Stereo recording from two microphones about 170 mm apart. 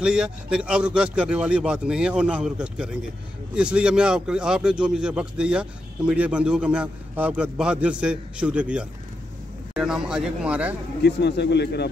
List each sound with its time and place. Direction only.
0.0 s speech: 5° right (ahead or behind)
11.0 s speech: 80° left